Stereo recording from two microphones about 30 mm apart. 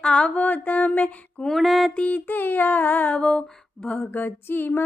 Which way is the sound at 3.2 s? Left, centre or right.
Left.